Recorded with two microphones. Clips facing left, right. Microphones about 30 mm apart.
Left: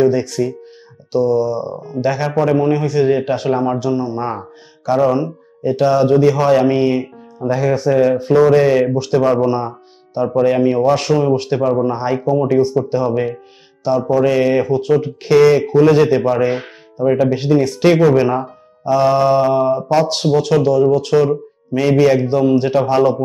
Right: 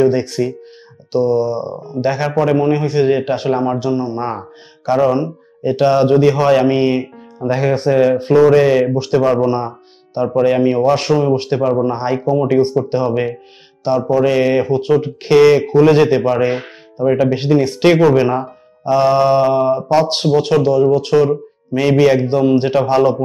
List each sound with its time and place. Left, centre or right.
0.0 s a man's voice: right
8.5 s a man's voice: centre
17.5 s a man's voice: right